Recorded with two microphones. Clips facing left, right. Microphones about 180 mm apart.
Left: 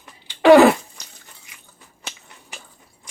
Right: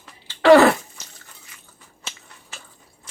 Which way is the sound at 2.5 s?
15° left (ahead or behind).